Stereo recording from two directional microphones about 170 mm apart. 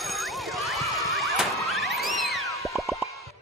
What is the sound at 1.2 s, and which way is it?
Music, centre (ahead or behind).